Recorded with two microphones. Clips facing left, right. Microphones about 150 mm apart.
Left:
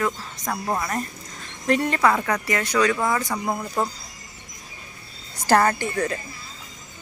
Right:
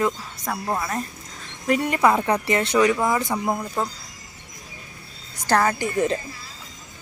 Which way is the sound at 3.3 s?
5° right (ahead or behind).